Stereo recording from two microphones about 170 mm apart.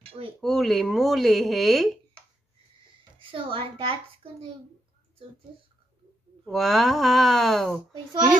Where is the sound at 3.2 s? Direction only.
30° right (ahead or behind).